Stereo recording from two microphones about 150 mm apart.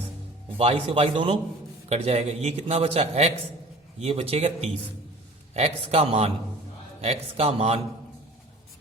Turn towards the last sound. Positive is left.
turn(degrees=-45)  # may be behind; listen again after turning